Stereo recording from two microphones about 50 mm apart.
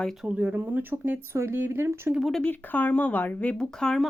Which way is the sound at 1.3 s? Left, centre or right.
Right.